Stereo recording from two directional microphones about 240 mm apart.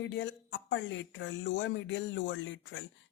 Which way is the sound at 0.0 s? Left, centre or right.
Left.